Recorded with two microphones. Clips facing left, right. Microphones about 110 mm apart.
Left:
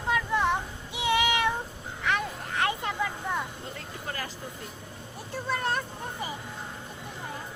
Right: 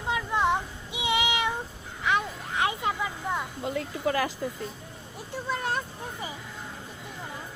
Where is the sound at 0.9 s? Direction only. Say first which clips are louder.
Left 2 dB; 15° right (ahead or behind).